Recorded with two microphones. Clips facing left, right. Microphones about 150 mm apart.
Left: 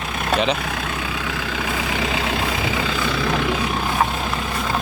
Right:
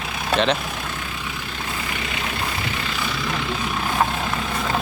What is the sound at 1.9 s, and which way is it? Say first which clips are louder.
Vehicle: left 6 dB; 90° left.